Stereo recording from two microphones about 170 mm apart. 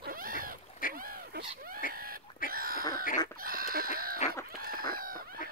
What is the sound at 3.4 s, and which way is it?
Livestock, 60° right (ahead or behind).